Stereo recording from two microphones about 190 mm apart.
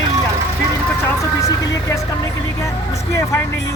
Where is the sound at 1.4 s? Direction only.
15° left (ahead or behind).